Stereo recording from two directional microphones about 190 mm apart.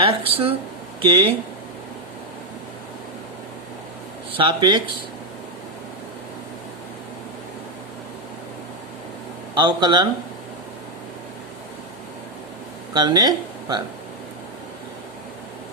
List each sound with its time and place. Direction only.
0.0 s speech: 30° right (ahead or behind)
4.4 s speech: 25° right (ahead or behind)
9.6 s speech: 25° right (ahead or behind)
12.9 s speech: 20° right (ahead or behind)